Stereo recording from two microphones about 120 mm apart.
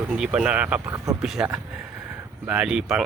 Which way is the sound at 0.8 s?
25° right (ahead or behind).